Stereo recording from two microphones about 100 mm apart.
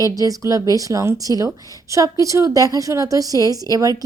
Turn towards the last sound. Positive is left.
turn(degrees=-35)  # may be behind; listen again after turning